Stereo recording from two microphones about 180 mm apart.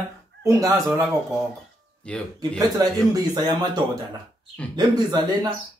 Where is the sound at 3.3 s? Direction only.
25° right (ahead or behind).